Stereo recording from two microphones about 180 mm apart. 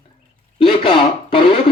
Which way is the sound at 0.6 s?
25° left (ahead or behind).